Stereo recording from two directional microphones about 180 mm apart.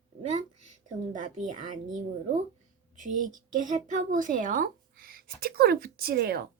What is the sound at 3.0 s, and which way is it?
Child singing, 45° right (ahead or behind).